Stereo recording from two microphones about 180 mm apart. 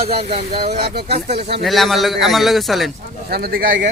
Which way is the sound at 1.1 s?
35° right (ahead or behind).